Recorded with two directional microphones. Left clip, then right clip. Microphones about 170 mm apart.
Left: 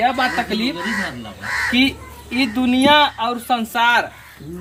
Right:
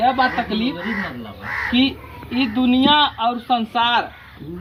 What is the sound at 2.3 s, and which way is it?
Speech, 50° left (ahead or behind).